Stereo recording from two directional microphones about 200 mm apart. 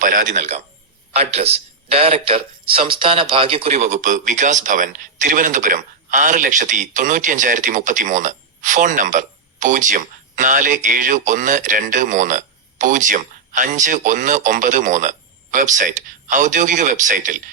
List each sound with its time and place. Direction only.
0.0 s a man's voice: 40° right (ahead or behind)